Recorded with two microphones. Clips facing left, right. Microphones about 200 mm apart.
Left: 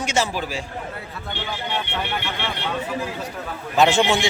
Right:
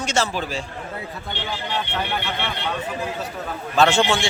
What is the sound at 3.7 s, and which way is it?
Speech, 20° left (ahead or behind).